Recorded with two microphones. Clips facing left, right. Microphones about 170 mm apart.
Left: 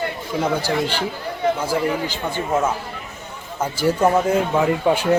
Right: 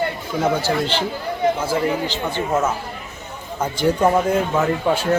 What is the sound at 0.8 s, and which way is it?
Speech, 10° left (ahead or behind).